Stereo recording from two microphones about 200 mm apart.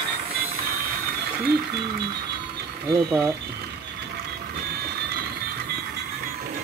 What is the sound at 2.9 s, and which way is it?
Speech, 15° right (ahead or behind).